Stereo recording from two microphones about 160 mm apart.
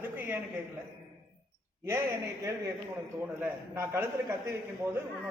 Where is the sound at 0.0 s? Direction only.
15° right (ahead or behind).